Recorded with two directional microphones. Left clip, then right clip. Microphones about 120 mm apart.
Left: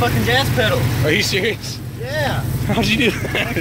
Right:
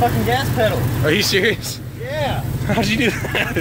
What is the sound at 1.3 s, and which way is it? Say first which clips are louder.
Speech: right 2 dB; 45° right (ahead or behind).